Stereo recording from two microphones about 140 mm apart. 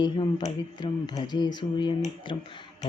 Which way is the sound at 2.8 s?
55° left (ahead or behind).